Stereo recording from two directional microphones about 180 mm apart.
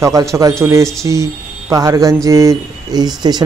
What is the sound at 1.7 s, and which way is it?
Speech, 20° right (ahead or behind).